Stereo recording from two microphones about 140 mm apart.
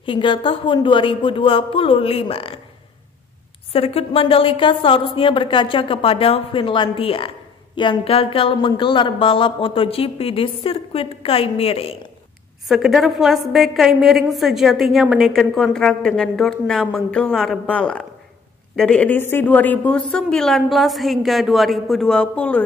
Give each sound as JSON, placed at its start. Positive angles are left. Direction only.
{"t": 0.0, "sound": "a woman's voice", "side_deg": 35}
{"t": 3.7, "sound": "a woman's voice", "side_deg": 45}
{"t": 12.6, "sound": "a woman's voice", "side_deg": 0}